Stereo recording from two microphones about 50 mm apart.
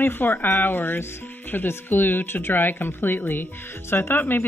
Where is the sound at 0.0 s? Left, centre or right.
Left.